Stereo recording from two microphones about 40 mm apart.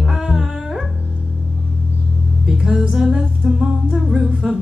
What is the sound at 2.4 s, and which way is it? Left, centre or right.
Music, centre.